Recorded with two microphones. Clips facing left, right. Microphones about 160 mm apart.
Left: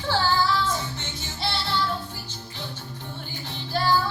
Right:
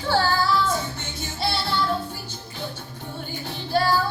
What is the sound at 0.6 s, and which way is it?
Music, 55° right (ahead or behind).